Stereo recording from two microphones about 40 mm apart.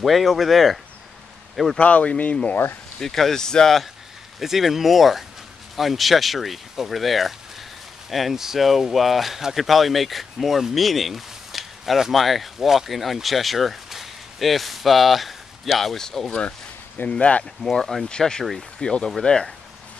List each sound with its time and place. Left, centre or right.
0.0 s speech: centre
1.8 s speech: left
3.0 s speech: centre
4.4 s speech: centre
17.1 s speech: left
17.7 s speech: centre
18.0 s speech: centre